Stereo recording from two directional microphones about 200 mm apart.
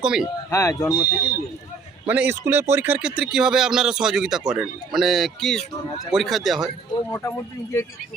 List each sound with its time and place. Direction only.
0.0 s speech: 5° right (ahead or behind)
0.5 s speech: 15° left (ahead or behind)
2.0 s speech: 10° right (ahead or behind)
7.1 s speech: 15° left (ahead or behind)